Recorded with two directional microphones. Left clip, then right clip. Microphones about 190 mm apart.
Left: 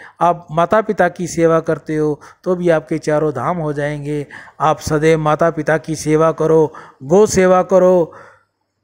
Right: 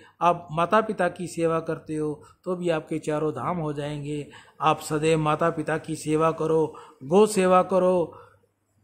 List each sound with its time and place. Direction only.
0.6 s a man's voice: 30° left (ahead or behind)